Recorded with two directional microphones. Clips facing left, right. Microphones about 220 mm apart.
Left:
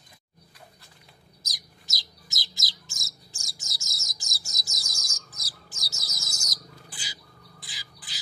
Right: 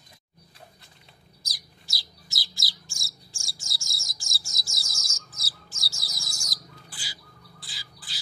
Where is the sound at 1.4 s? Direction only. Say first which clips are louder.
Left 1 dB; 20° left (ahead or behind).